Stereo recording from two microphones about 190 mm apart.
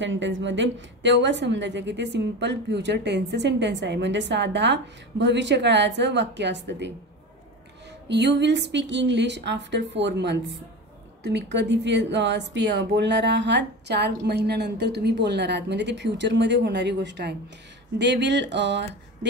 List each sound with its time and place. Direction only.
0.0 s a woman's voice: 75° right (ahead or behind)
8.1 s a woman's voice: 65° right (ahead or behind)